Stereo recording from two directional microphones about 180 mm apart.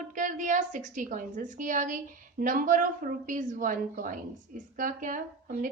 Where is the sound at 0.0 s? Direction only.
45° right (ahead or behind).